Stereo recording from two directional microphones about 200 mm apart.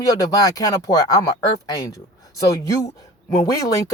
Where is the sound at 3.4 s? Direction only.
15° left (ahead or behind).